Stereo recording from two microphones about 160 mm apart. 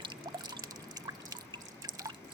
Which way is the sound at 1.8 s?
20° right (ahead or behind).